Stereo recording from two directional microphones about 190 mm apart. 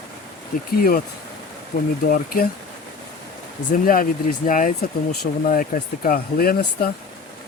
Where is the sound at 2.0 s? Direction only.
50° left (ahead or behind).